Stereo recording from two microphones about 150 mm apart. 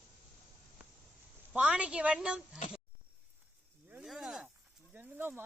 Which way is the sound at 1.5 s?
10° right (ahead or behind).